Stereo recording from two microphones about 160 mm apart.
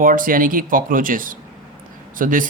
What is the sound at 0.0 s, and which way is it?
Speech, 60° right (ahead or behind).